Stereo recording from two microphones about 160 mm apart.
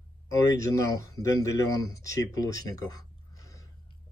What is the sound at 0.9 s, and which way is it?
Speech, 20° left (ahead or behind).